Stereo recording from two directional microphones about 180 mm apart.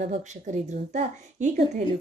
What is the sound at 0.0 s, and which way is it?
A woman's voice, 40° right (ahead or behind).